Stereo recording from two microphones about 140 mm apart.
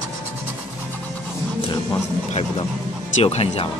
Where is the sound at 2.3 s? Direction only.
45° left (ahead or behind).